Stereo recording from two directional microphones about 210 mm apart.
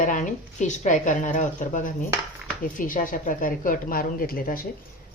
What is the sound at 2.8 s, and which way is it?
A woman's voice, 40° left (ahead or behind).